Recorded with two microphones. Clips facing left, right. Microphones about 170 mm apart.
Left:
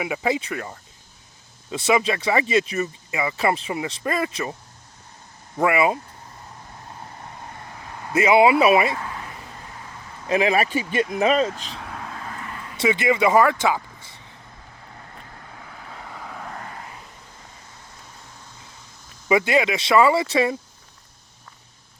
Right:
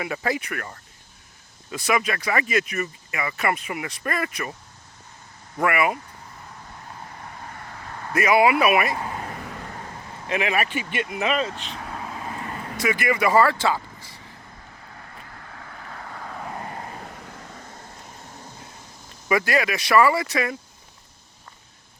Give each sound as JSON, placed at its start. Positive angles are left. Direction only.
{"t": 0.0, "sound": "speech", "side_deg": 15}
{"t": 5.5, "sound": "speech", "side_deg": 20}
{"t": 7.5, "sound": "vehicle", "side_deg": 15}
{"t": 8.1, "sound": "speech", "side_deg": 25}
{"t": 9.0, "sound": "a sound", "side_deg": -30}
{"t": 9.4, "sound": "vehicle", "side_deg": -65}
{"t": 10.2, "sound": "speech", "side_deg": 35}
{"t": 11.5, "sound": "vehicle", "side_deg": 0}
{"t": 12.4, "sound": "vehicle", "side_deg": -30}
{"t": 12.7, "sound": "speech", "side_deg": 25}
{"t": 15.5, "sound": "vehicle", "side_deg": 10}
{"t": 16.8, "sound": "vehicle", "side_deg": -50}
{"t": 17.1, "sound": "vehicle", "side_deg": -70}
{"t": 19.3, "sound": "speech", "side_deg": 20}